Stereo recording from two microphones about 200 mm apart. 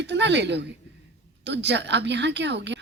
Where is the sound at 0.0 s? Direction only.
60° right (ahead or behind).